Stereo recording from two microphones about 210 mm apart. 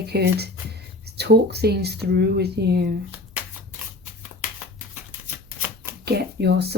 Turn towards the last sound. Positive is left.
turn(degrees=-50)  # may be behind; listen again after turning